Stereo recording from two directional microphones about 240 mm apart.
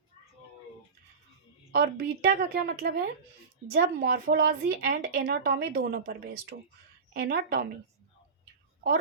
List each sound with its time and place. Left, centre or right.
1.7 s a woman's voice: right